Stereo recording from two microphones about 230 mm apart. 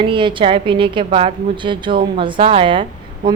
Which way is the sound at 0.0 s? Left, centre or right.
Right.